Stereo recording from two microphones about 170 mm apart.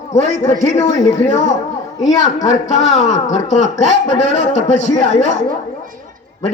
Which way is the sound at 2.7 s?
40° left (ahead or behind).